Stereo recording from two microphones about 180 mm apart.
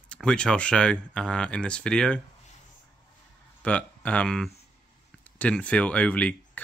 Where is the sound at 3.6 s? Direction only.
5° left (ahead or behind).